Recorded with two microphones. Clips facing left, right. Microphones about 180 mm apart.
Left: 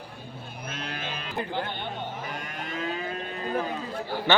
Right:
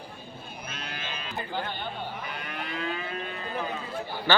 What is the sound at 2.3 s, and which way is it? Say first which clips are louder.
Livestock: left 1 dB; 45° left (ahead or behind).